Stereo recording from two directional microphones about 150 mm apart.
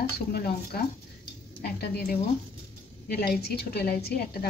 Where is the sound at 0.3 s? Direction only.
90° left.